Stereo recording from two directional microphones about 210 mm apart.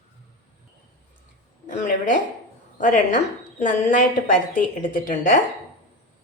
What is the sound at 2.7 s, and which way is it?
A woman's voice, 35° left (ahead or behind).